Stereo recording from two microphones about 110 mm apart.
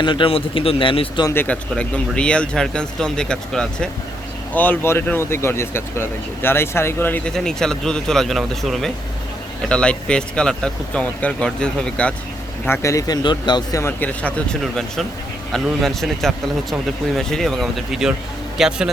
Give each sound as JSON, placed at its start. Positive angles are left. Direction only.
{"t": 0.0, "sound": "speech", "side_deg": 45}
{"t": 1.3, "sound": "speech", "side_deg": 20}
{"t": 7.3, "sound": "speech", "side_deg": 5}
{"t": 12.6, "sound": "speech", "side_deg": 25}
{"t": 13.2, "sound": "speech", "side_deg": 40}
{"t": 14.0, "sound": "a man's voice", "side_deg": 10}